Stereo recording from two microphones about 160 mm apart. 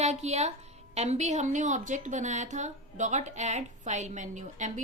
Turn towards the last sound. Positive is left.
turn(degrees=-50)  # may be behind; listen again after turning